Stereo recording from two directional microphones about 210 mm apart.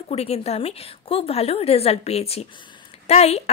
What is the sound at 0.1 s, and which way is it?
A woman's voice, 30° left (ahead or behind).